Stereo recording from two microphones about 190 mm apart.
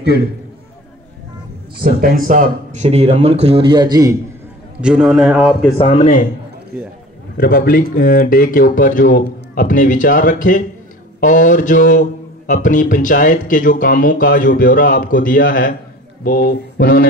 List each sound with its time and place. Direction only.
1.8 s speech: 50° right (ahead or behind); by 4.2 s 20° right (ahead or behind)
4.8 s a man's voice: 5° right (ahead or behind)
5.9 s a man's voice: 40° left (ahead or behind)
7.3 s speech: 45° left (ahead or behind)